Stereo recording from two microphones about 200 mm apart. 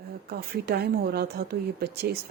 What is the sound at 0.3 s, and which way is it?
Speech, 50° right (ahead or behind).